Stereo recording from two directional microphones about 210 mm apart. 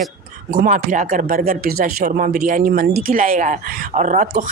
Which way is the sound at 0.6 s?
40° right (ahead or behind).